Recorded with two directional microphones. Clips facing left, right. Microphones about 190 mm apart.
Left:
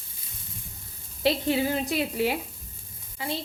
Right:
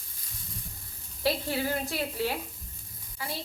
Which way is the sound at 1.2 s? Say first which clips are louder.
Left 5 dB; 20° left (ahead or behind).